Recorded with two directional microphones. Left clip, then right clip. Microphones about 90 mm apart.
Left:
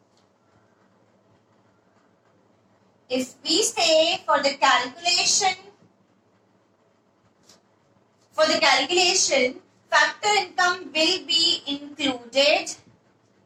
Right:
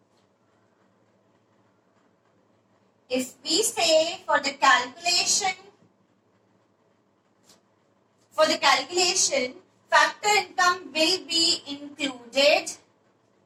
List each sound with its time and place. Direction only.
3.1 s a woman's voice: 35° left (ahead or behind)
8.3 s a woman's voice: 35° left (ahead or behind)